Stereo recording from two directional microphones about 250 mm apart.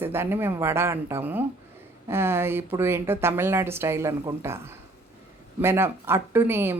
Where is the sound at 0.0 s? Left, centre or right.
Centre.